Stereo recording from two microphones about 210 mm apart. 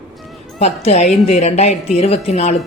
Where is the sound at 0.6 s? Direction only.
30° left (ahead or behind).